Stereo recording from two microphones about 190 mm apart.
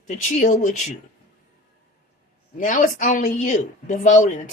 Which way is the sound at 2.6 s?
40° left (ahead or behind).